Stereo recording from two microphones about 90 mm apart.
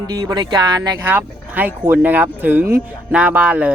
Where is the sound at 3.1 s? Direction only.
15° right (ahead or behind).